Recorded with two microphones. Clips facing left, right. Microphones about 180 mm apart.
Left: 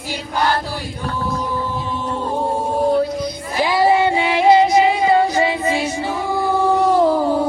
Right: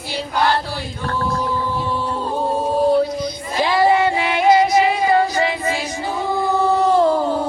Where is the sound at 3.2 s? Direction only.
10° left (ahead or behind).